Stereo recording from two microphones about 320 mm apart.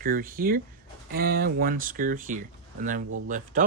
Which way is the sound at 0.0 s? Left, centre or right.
Right.